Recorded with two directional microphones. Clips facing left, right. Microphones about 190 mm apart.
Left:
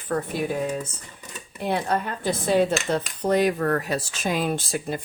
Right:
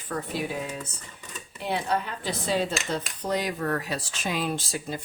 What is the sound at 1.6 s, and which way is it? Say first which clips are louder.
Speech: left 3 dB; 50° left (ahead or behind).